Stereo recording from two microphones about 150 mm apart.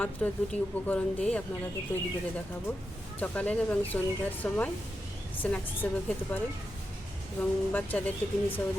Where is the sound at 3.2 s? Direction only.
10° left (ahead or behind).